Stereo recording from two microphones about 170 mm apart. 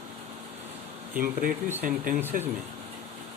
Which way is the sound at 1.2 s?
55° right (ahead or behind).